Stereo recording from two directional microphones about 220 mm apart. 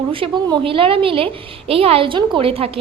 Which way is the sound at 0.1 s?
25° right (ahead or behind).